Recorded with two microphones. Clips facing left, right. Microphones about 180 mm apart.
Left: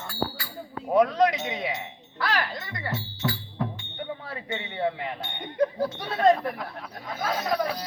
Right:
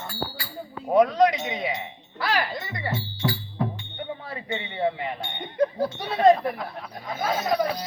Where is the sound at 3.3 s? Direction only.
15° right (ahead or behind).